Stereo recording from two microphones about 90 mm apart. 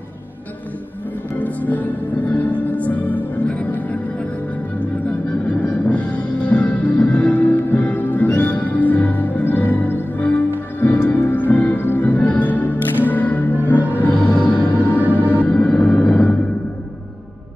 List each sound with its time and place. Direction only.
1.4 s music: 20° left (ahead or behind)
5.6 s music: 15° left (ahead or behind)